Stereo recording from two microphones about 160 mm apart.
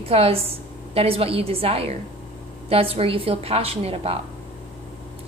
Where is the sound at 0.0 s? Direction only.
40° right (ahead or behind).